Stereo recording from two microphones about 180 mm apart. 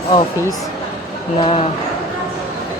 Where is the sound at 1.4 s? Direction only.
30° left (ahead or behind).